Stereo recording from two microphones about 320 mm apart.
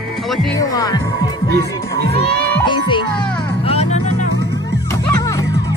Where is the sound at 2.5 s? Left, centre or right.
Centre.